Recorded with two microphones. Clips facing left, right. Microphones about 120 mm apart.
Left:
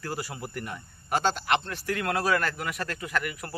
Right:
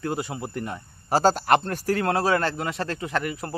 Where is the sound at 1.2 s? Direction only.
40° right (ahead or behind).